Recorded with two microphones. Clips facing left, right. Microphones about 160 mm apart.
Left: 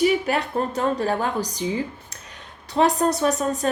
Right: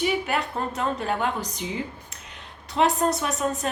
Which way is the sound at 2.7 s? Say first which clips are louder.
Left 3 dB; 35° left (ahead or behind).